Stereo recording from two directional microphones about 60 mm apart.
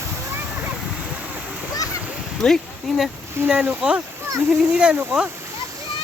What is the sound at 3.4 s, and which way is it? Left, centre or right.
Speech, right.